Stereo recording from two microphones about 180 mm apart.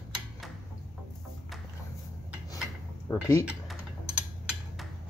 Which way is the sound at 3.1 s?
10° left (ahead or behind).